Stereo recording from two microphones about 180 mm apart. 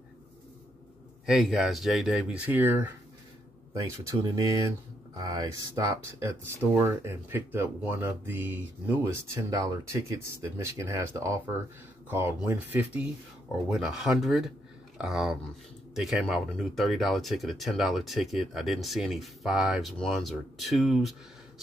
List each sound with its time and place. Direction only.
1.2 s speech: centre (ahead or behind)
4.1 s speech: 20° right (ahead or behind); by 21.2 s centre (ahead or behind)